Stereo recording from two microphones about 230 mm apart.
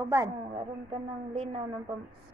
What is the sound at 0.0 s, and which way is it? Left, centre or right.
Speech, centre.